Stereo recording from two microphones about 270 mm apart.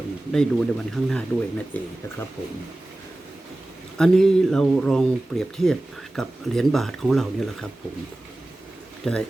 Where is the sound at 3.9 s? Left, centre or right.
Centre.